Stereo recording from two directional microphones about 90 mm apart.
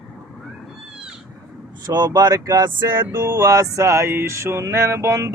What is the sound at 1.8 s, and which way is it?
Male singing, 50° right (ahead or behind).